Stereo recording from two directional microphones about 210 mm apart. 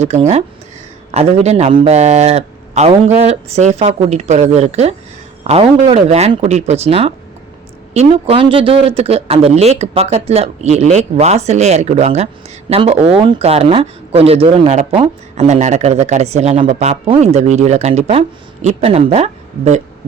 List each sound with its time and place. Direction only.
0.0 s a man's voice: 30° right (ahead or behind)